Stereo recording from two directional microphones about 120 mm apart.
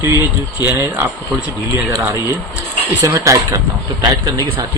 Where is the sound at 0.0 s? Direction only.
25° right (ahead or behind).